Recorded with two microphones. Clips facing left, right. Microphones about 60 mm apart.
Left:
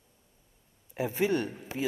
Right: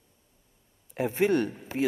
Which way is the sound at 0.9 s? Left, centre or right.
Right.